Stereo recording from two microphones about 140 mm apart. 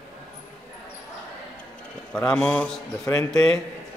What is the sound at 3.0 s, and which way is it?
Speech, 20° left (ahead or behind).